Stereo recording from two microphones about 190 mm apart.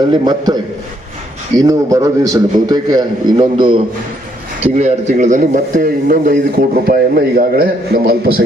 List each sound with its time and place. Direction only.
0.1 s a man's voice: 20° right (ahead or behind)
4.6 s a man's voice: 35° right (ahead or behind); by 8.4 s 50° right (ahead or behind)